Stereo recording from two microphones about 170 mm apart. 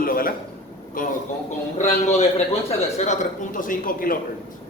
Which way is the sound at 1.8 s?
45° left (ahead or behind).